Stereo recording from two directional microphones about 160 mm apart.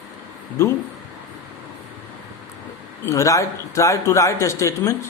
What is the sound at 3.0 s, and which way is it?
A man's voice, 20° left (ahead or behind).